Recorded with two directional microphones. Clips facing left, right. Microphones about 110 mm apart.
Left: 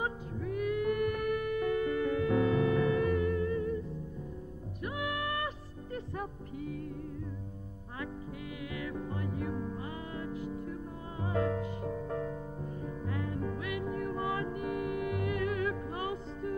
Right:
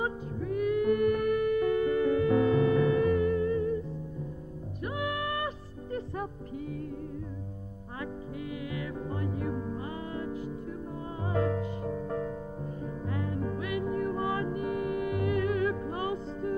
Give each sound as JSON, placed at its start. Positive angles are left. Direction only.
{"t": 0.0, "sound": "music", "side_deg": -30}
{"t": 4.8, "sound": "music", "side_deg": -35}
{"t": 8.7, "sound": "music", "side_deg": -30}
{"t": 13.1, "sound": "music", "side_deg": -30}